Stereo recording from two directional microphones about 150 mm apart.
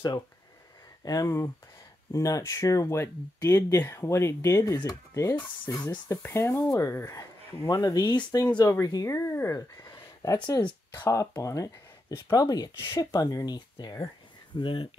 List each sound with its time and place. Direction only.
1.0 s speech: 20° left (ahead or behind)